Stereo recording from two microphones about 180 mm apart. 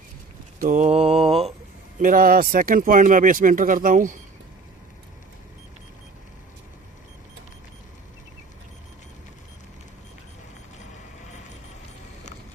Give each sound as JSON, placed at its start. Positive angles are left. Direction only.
{"t": 0.6, "sound": "mantra", "side_deg": -40}
{"t": 2.0, "sound": "speech", "side_deg": -50}